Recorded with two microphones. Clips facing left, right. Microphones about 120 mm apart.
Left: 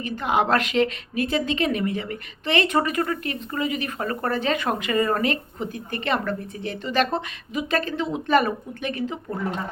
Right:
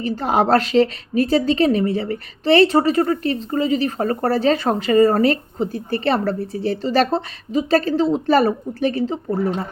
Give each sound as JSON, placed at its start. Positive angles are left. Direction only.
{"t": 0.0, "sound": "a woman's voice", "side_deg": -35}